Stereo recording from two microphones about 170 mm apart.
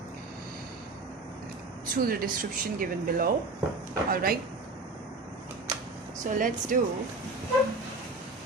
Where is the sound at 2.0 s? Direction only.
60° right (ahead or behind).